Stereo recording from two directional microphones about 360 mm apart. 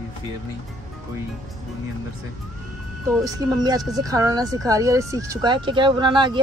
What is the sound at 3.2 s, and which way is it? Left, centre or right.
Speech, centre.